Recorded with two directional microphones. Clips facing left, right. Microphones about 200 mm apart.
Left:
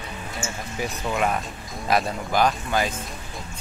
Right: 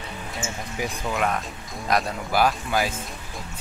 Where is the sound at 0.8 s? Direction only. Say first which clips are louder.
Left 1 dB; centre (ahead or behind).